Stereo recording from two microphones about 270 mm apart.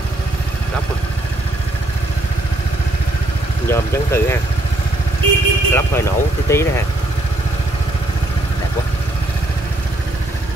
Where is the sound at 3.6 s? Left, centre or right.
Centre.